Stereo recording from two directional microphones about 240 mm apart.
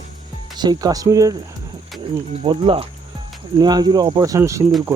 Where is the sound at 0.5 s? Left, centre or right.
Centre.